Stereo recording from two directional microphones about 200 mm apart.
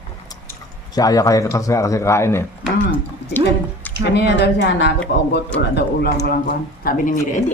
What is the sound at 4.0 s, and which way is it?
Speech, 55° left (ahead or behind).